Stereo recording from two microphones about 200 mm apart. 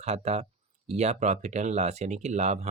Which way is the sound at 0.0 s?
30° right (ahead or behind).